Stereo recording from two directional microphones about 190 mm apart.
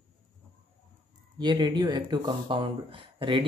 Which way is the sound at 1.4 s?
25° right (ahead or behind).